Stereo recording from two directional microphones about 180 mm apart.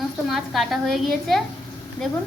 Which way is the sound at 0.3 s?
Centre (ahead or behind).